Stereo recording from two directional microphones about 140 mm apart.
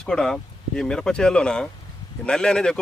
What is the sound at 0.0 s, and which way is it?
Speech, 5° left (ahead or behind).